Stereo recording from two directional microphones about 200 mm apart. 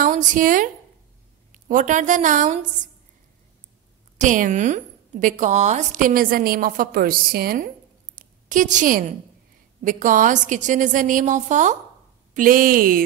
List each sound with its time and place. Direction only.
0.0 s a woman's voice: 40° right (ahead or behind)
4.2 s a woman's voice: 40° right (ahead or behind)
8.2 s a sound: 40° right (ahead or behind)
9.8 s a woman's voice: 40° right (ahead or behind)